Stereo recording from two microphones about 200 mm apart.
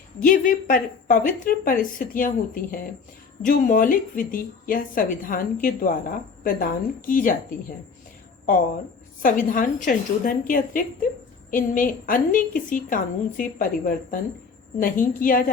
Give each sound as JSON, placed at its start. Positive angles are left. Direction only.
{"t": 0.2, "sound": "a woman's voice", "side_deg": 45}
{"t": 9.2, "sound": "a woman's voice", "side_deg": 40}